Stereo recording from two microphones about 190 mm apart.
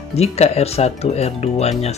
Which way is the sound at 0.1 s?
35° left (ahead or behind).